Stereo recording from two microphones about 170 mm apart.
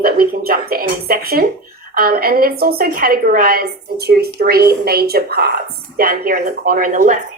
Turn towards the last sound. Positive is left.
turn(degrees=-50)  # may be behind; listen again after turning